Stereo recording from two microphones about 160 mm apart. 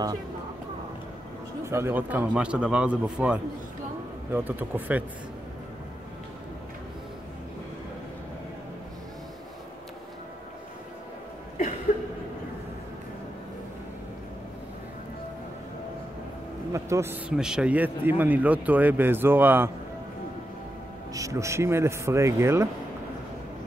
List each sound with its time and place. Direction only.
1.6 s a man's voice: 15° right (ahead or behind)
11.9 s chuckle: 50° left (ahead or behind)
16.7 s a man's voice: 15° right (ahead or behind)
21.1 s a man's voice: 20° right (ahead or behind)